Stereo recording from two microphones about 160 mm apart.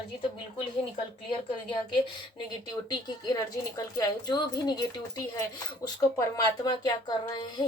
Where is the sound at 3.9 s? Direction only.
25° left (ahead or behind).